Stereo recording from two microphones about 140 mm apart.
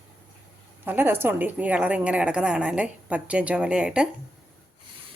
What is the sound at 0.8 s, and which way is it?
Speech, 15° right (ahead or behind).